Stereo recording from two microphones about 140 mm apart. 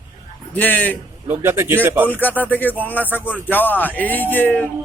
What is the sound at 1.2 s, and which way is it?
Speech, 20° right (ahead or behind).